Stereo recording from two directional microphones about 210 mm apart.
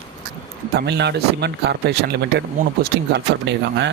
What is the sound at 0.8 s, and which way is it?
Speech, 55° right (ahead or behind).